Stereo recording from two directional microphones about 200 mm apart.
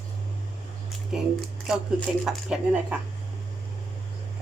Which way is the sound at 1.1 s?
5° right (ahead or behind).